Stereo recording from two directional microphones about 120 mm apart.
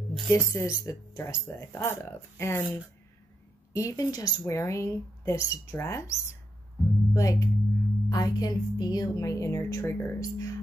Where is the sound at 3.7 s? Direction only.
25° left (ahead or behind).